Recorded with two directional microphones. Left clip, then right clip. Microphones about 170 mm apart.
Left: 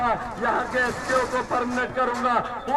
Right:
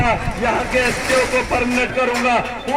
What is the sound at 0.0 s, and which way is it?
Vehicle, 20° right (ahead or behind).